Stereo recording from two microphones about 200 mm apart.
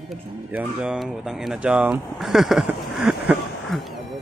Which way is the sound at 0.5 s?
5° right (ahead or behind).